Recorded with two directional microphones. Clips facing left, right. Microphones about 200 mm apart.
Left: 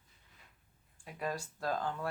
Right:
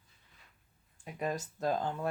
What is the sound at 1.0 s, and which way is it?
Speech, 20° right (ahead or behind).